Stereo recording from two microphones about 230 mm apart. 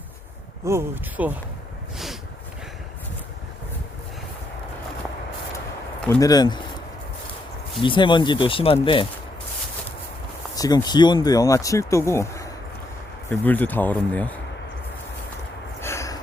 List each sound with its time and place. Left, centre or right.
0.6 s speech: centre
6.1 s speech: centre
7.8 s speech: left
10.5 s speech: centre
15.8 s snort: centre